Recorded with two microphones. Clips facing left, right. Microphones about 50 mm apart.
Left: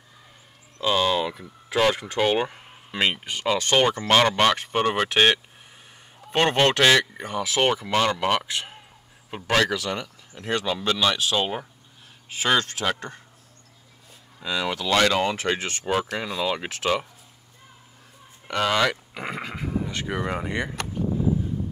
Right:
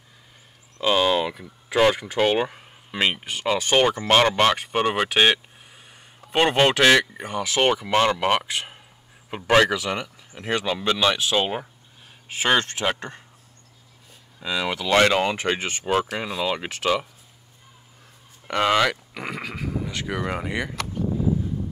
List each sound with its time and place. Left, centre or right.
0.7 s speech: centre
14.4 s speech: centre
14.9 s speech: right; by 16.9 s centre
18.5 s speech: centre
19.1 s speech: left
20.2 s speech: centre